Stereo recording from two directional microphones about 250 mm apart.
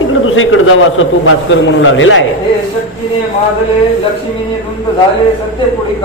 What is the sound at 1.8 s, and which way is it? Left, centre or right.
Speech, left.